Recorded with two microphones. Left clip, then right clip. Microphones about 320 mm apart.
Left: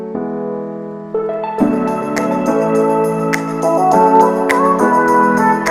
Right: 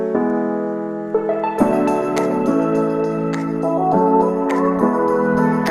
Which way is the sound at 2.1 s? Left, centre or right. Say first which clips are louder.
Left 2 dB; centre.